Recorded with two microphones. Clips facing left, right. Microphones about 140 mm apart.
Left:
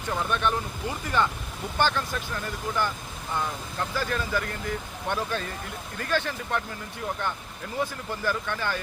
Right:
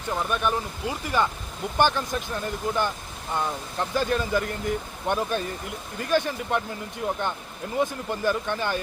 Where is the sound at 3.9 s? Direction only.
20° right (ahead or behind).